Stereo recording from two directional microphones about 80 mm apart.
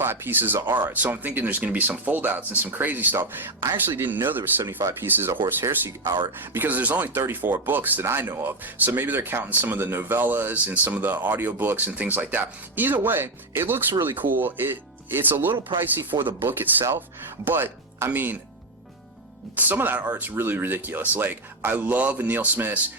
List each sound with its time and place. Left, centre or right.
0.0 s speech: right
4.8 s speech: right
5.0 s speech: right
19.5 s speech: right